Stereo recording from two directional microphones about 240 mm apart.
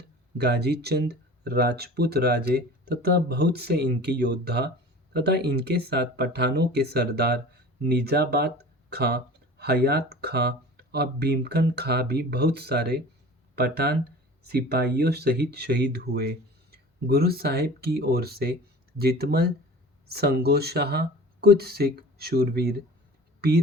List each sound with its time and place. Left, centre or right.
0.3 s speech: right